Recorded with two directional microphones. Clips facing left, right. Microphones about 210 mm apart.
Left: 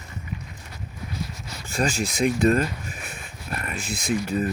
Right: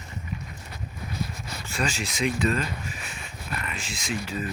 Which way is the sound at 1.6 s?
50° left (ahead or behind).